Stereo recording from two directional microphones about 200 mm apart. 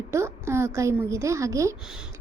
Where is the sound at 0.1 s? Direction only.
15° right (ahead or behind).